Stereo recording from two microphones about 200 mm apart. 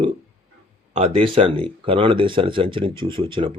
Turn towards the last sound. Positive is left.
turn(degrees=-25)  # may be behind; listen again after turning